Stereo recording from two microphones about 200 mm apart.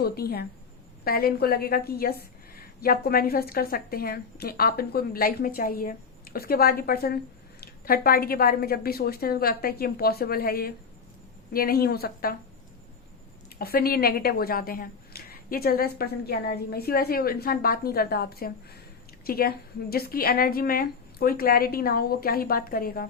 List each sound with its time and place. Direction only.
0.0 s a woman's voice: 50° left (ahead or behind)
13.6 s a woman's voice: 50° left (ahead or behind)